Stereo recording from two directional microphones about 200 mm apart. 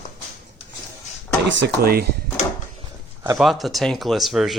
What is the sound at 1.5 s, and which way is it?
Speech, 55° right (ahead or behind).